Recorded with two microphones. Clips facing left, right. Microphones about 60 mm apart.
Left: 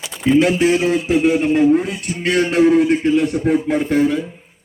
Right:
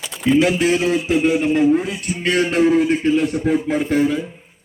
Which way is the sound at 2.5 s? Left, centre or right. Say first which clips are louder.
Left 3 dB; left.